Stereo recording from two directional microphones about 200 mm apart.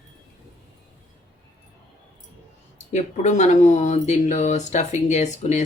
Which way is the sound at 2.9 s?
35° left (ahead or behind).